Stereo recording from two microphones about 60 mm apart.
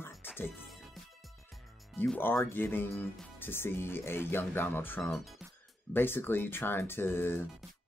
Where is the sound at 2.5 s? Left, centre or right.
Left.